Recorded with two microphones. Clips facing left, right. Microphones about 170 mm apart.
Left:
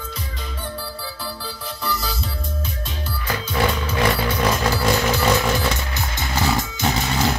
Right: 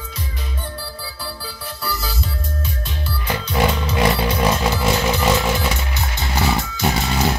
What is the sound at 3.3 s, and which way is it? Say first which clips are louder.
Music: right 2 dB; 20° right (ahead or behind).